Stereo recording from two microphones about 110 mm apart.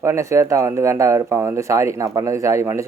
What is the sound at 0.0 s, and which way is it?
Speech, 25° right (ahead or behind).